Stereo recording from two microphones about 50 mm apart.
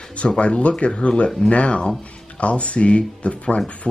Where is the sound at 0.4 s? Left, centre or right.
Left.